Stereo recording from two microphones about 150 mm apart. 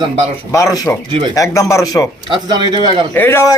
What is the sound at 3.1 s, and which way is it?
Speech, 15° left (ahead or behind).